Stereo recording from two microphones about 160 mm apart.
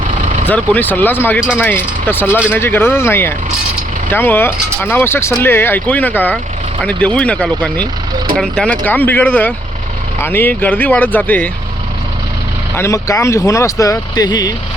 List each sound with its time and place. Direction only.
0.4 s speech: 10° left (ahead or behind)
12.7 s speech: 15° left (ahead or behind)